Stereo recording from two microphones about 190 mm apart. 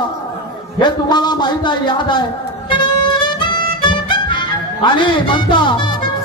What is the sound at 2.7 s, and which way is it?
Music, 25° left (ahead or behind).